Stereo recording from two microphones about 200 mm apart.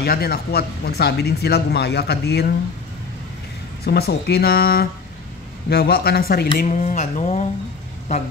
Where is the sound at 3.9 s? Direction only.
50° left (ahead or behind).